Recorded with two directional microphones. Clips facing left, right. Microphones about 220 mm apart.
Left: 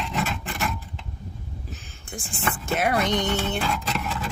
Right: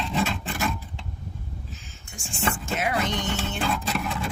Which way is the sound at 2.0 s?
35° left (ahead or behind).